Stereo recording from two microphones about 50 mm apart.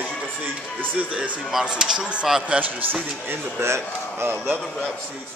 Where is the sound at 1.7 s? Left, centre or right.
Centre.